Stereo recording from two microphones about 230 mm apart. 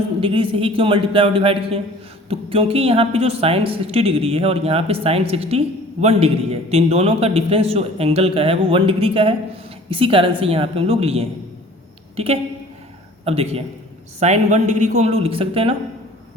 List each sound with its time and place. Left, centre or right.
0.2 s a woman's voice: right